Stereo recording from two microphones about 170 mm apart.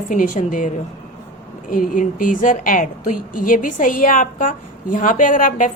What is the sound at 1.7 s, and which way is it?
A woman's voice, 55° left (ahead or behind).